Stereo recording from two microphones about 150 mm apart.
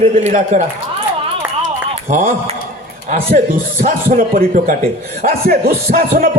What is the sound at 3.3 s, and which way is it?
Speech, 55° right (ahead or behind).